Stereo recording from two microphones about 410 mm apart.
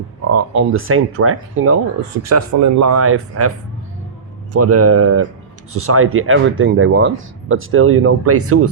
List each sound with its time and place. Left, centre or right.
0.3 s speech: right
2.3 s speech: right
4.5 s speech: right